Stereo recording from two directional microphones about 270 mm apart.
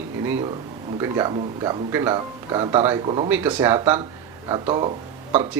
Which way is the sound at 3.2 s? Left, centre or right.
Centre.